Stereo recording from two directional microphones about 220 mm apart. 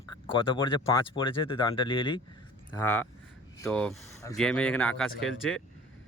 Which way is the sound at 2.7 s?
10° left (ahead or behind).